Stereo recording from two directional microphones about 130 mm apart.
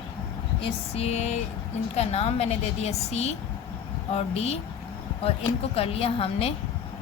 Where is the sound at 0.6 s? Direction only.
50° left (ahead or behind).